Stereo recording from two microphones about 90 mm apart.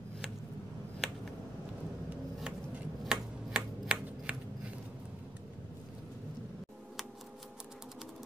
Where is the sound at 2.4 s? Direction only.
5° right (ahead or behind).